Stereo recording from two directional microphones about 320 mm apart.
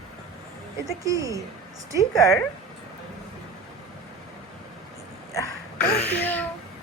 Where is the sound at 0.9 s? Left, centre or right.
Centre.